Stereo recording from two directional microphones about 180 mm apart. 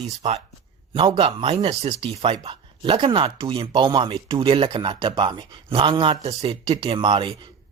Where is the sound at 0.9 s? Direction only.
30° right (ahead or behind).